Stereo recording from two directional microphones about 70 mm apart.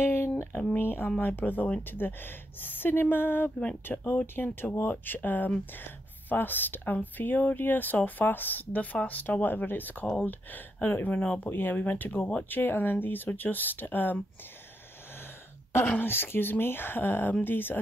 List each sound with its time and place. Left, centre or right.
0.0 s a sound: left
1.2 s speech: left
15.9 s speech: left